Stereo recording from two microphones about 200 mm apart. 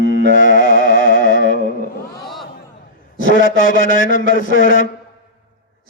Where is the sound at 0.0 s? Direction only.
40° left (ahead or behind).